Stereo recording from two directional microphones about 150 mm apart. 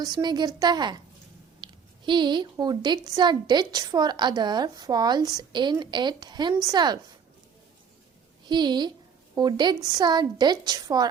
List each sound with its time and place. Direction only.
0.0 s speech: 30° right (ahead or behind)
8.4 s speech: 30° right (ahead or behind)